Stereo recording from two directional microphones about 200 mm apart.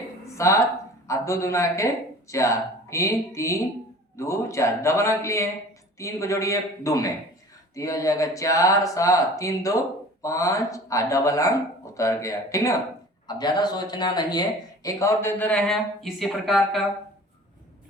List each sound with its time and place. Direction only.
0.3 s speech: 15° left (ahead or behind)